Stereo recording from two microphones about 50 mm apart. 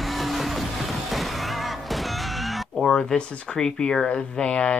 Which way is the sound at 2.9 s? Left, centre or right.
Centre.